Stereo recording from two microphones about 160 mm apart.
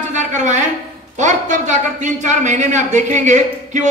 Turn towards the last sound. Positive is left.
turn(degrees=-50)  # may be behind; listen again after turning